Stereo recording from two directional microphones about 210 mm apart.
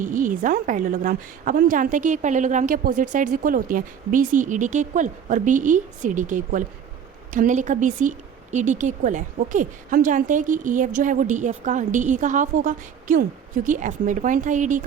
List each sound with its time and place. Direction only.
0.0 s a woman's voice: 40° right (ahead or behind)